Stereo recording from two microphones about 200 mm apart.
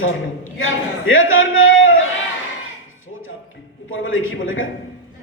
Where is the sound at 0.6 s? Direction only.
80° left.